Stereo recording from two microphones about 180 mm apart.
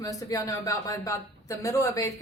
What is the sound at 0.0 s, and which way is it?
A woman's voice, 20° left (ahead or behind).